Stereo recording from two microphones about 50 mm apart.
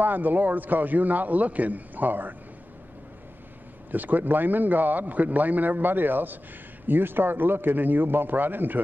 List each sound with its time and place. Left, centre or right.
0.0 s a man's voice: right
3.9 s a man's voice: right